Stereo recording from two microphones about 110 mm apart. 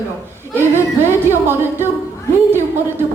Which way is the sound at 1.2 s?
20° right (ahead or behind).